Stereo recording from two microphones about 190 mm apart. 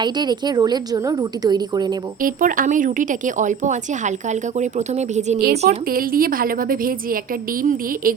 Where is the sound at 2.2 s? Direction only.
45° right (ahead or behind).